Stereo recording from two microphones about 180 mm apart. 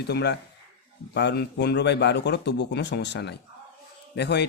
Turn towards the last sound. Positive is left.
turn(degrees=70)  # may be behind; listen again after turning